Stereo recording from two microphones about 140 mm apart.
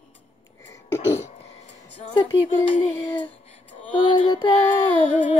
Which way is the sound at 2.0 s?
35° left (ahead or behind).